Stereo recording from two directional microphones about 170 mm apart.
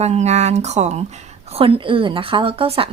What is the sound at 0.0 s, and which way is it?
A woman's voice, 40° right (ahead or behind).